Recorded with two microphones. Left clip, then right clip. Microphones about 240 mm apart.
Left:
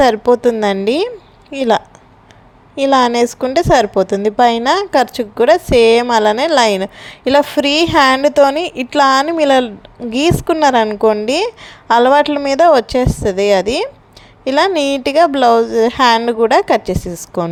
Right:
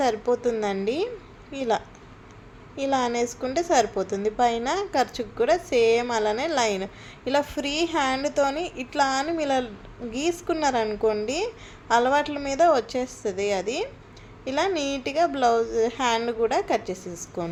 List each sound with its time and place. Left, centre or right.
0.0 s a woman's voice: left